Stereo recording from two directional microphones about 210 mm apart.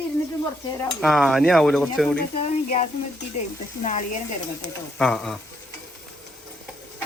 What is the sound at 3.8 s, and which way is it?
Speech, 35° left (ahead or behind).